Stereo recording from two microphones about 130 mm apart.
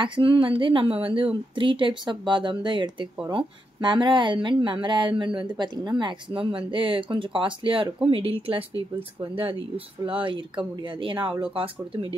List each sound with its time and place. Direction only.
0.0 s a woman's voice: 40° right (ahead or behind)